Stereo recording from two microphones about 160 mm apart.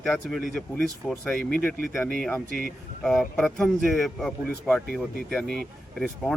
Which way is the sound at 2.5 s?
60° right (ahead or behind).